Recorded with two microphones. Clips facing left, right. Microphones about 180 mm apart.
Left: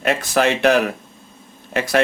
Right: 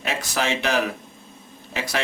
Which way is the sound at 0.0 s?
60° left (ahead or behind).